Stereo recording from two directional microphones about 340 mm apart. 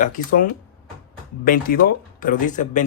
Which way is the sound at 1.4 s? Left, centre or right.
Left.